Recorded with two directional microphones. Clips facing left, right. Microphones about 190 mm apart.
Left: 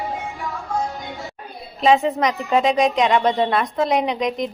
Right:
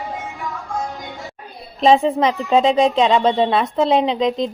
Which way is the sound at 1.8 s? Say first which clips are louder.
Right 3 dB; 30° right (ahead or behind).